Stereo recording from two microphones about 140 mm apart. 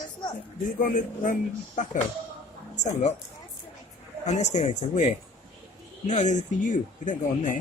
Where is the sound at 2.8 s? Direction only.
60° left (ahead or behind).